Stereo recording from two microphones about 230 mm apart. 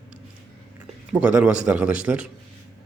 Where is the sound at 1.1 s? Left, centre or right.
Centre.